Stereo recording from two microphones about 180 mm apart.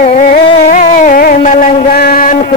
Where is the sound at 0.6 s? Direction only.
50° left (ahead or behind).